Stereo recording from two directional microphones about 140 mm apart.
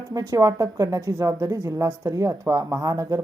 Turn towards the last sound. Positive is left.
turn(degrees=-25)  # may be behind; listen again after turning